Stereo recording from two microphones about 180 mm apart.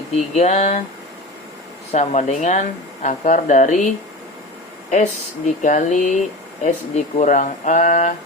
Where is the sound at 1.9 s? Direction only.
40° left (ahead or behind).